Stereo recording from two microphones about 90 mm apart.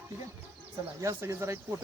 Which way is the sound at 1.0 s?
30° right (ahead or behind).